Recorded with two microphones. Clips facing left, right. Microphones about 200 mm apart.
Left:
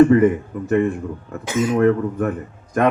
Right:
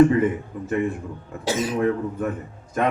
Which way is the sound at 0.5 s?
65° left (ahead or behind).